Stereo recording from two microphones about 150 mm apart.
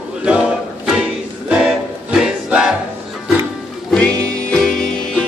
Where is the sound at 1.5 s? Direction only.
5° right (ahead or behind).